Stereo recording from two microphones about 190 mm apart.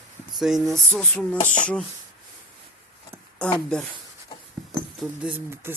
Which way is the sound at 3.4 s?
5° left (ahead or behind).